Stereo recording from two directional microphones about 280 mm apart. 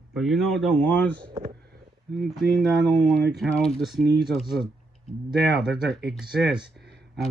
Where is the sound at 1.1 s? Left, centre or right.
Centre.